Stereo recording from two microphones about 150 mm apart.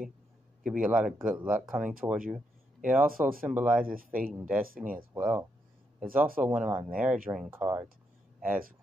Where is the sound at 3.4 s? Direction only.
10° right (ahead or behind).